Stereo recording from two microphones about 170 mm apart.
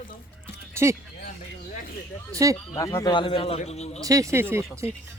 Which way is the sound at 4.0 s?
20° right (ahead or behind).